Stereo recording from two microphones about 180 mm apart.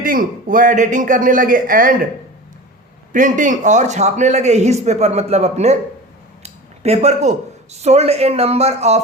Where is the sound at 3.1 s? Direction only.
45° right (ahead or behind).